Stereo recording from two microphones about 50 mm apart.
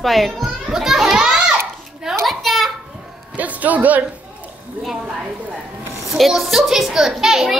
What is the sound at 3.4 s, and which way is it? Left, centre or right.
Speech, right.